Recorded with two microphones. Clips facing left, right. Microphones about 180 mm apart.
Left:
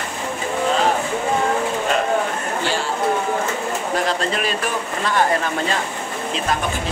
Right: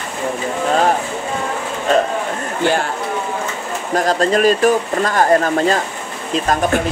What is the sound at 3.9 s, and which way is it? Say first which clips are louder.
Speech: right 8 dB; 45° right (ahead or behind).